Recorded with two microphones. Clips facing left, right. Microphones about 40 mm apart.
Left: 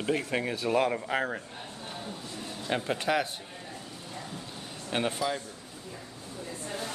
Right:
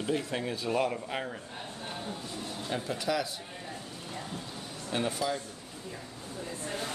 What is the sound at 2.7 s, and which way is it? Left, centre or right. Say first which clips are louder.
Speech: left 4 dB; left.